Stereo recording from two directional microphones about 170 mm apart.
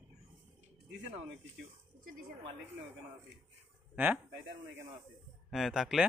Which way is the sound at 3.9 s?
10° right (ahead or behind).